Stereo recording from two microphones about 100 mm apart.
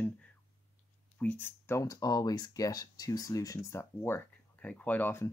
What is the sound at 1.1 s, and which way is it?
Speech, 20° left (ahead or behind).